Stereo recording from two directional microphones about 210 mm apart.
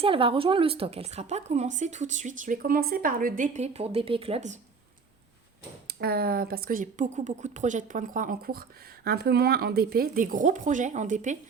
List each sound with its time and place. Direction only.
0.0 s speech: 25° right (ahead or behind)
5.9 s speech: 45° right (ahead or behind)